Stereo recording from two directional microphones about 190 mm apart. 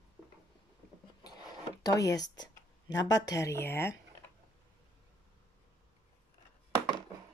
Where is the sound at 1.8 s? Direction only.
20° left (ahead or behind).